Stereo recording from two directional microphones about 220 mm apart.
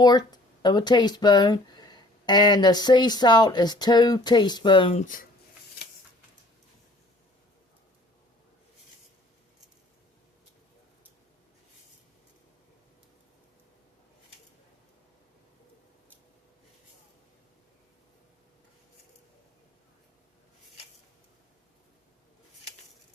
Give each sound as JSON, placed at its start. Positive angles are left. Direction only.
{"t": 0.0, "sound": "speech", "side_deg": 20}